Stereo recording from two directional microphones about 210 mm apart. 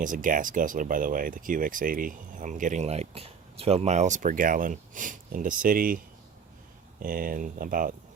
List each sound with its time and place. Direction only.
0.0 s speech: 40° right (ahead or behind)
7.0 s speech: 40° right (ahead or behind)